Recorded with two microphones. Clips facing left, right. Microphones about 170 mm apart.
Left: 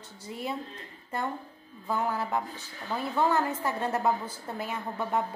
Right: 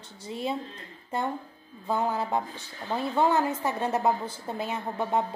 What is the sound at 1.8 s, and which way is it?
A woman's voice, 25° right (ahead or behind).